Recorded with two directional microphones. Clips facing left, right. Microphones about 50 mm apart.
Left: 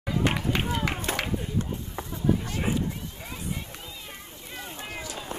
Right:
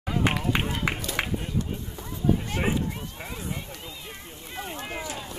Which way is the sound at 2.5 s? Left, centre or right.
Right.